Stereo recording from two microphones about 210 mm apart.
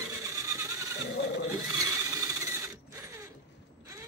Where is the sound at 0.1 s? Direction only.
15° right (ahead or behind).